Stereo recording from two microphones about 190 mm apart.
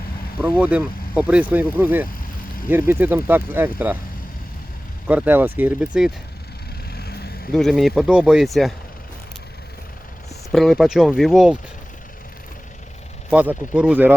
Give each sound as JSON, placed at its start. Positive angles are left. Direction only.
{"t": 0.6, "sound": "speech", "side_deg": -5}
{"t": 5.0, "sound": "speech", "side_deg": -10}
{"t": 6.9, "sound": "vehicle", "side_deg": 55}
{"t": 7.5, "sound": "speech", "side_deg": 0}
{"t": 10.5, "sound": "speech", "side_deg": 0}
{"t": 13.3, "sound": "speech", "side_deg": -5}